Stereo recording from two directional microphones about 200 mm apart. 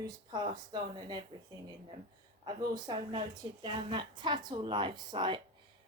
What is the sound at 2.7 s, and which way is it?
A woman's voice, 25° right (ahead or behind).